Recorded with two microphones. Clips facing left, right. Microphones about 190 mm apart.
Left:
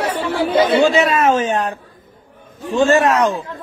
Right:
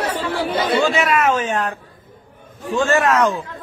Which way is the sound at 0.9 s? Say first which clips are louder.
Left 3 dB; 25° left (ahead or behind).